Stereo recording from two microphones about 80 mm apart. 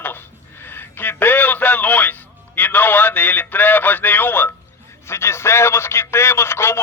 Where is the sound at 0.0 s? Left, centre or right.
Left.